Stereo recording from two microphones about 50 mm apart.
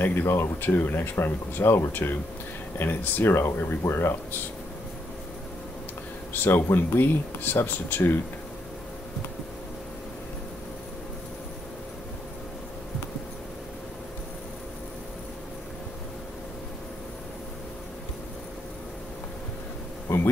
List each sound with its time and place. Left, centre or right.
0.0 s speech: left
6.3 s speech: left